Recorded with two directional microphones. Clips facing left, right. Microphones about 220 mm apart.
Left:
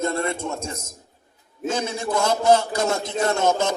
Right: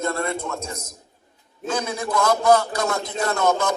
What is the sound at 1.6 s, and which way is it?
A man's voice, 25° left (ahead or behind).